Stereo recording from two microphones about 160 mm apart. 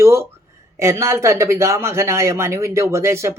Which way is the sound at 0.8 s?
15° right (ahead or behind).